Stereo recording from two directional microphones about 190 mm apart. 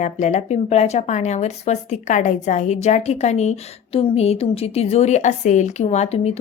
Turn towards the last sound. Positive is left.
turn(degrees=35)  # may be behind; listen again after turning